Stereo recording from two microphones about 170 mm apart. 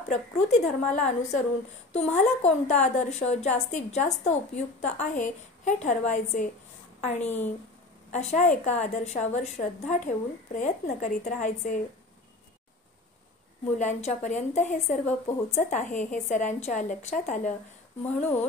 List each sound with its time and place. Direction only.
0.1 s a woman's voice: 40° left (ahead or behind)
13.7 s a woman's voice: 45° left (ahead or behind)